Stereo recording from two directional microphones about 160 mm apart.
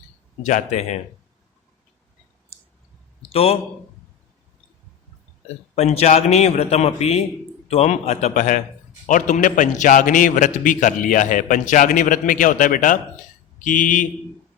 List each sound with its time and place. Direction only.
0.4 s a man's voice: 50° left (ahead or behind)
2.5 s clicking: 40° left (ahead or behind)
3.2 s a sound: 35° left (ahead or behind)
5.7 s a man's voice: 40° left (ahead or behind)